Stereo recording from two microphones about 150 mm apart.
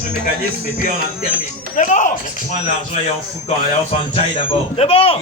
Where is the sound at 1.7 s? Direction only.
55° left (ahead or behind).